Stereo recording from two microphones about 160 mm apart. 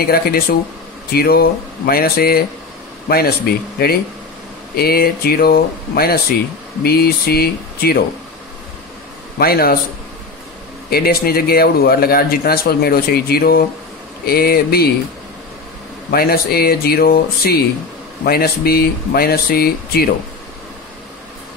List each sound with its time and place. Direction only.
0.0 s speech: 70° left (ahead or behind)
9.4 s speech: 70° left (ahead or behind)
10.9 s speech: 75° left (ahead or behind)
16.1 s speech: 75° left (ahead or behind)